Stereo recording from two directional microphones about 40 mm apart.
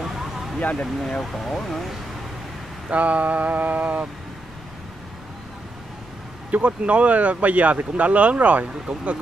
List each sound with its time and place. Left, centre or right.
0.0 s a sound: centre
0.6 s speech: left
1.2 s speech: centre
2.9 s speech: right
6.5 s speech: right